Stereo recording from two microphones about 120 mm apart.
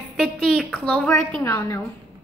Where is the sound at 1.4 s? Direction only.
20° left (ahead or behind).